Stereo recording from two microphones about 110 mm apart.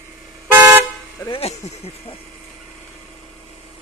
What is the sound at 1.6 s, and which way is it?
Speech, 90° left.